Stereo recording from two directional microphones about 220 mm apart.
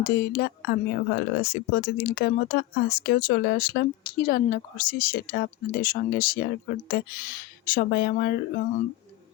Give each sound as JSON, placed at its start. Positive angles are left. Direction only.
{"t": 0.0, "sound": "speech", "side_deg": 45}